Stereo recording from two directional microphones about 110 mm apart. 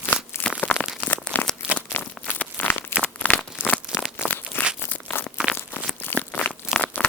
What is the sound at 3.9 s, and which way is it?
Crumpling, 5° right (ahead or behind).